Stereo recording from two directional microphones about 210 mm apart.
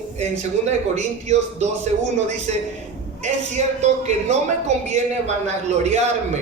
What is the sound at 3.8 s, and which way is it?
Speech, 35° right (ahead or behind).